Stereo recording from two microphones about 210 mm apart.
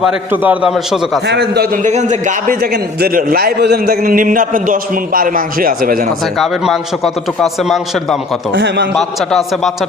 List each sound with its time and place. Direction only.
0.0 s a man's voice: 5° right (ahead or behind)
1.3 s a man's voice: 50° right (ahead or behind)
6.3 s a man's voice: centre (ahead or behind)
8.5 s a man's voice: 55° right (ahead or behind)
9.0 s a man's voice: centre (ahead or behind)